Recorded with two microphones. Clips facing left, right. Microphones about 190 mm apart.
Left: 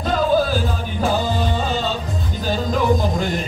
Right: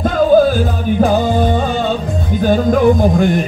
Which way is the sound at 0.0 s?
50° right (ahead or behind).